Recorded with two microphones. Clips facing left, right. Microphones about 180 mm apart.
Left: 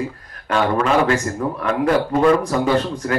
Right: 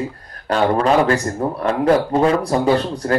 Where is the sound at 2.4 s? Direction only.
35° right (ahead or behind).